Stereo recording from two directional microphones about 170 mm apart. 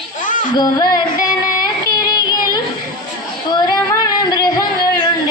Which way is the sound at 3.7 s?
20° left (ahead or behind).